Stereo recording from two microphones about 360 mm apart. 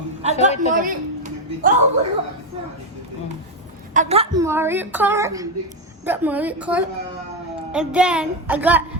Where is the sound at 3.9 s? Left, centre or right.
Centre.